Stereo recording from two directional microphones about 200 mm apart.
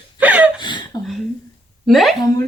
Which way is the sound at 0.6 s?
20° left (ahead or behind).